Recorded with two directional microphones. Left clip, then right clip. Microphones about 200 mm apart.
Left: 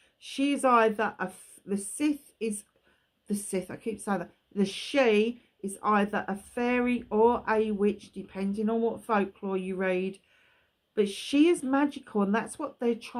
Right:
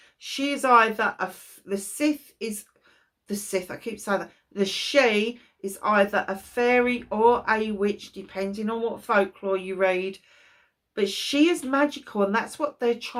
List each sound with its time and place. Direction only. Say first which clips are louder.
0.2 s speech: right 1 dB; 50° left (ahead or behind)